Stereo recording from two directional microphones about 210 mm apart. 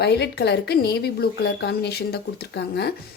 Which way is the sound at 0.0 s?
50° left (ahead or behind).